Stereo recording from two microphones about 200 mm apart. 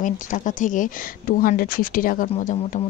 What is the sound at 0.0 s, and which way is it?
Speech, 40° left (ahead or behind).